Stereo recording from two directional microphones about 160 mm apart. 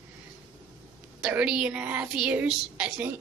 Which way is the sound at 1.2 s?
5° right (ahead or behind).